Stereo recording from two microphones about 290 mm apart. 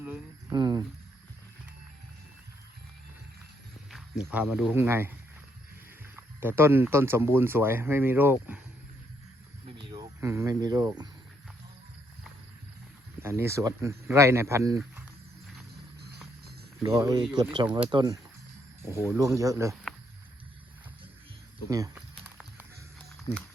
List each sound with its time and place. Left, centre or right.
0.0 s speech: centre
4.2 s speech: centre
6.1 s speech: centre
9.6 s a sound: centre
13.2 s speech: centre
16.8 s speech: centre
21.7 s a sound: centre